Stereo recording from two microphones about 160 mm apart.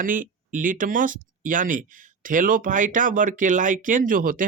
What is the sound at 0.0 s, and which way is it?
Speech, 55° right (ahead or behind).